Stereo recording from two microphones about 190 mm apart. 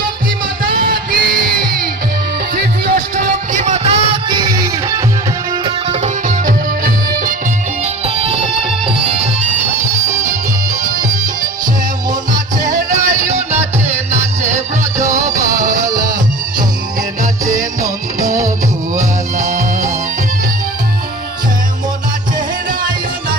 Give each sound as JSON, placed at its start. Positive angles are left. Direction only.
{"t": 0.6, "sound": "music", "side_deg": -50}
{"t": 5.6, "sound": "music", "side_deg": -35}
{"t": 8.0, "sound": "music", "side_deg": -30}
{"t": 12.3, "sound": "music", "side_deg": -20}
{"t": 18.3, "sound": "music", "side_deg": -15}
{"t": 19.4, "sound": "music", "side_deg": -40}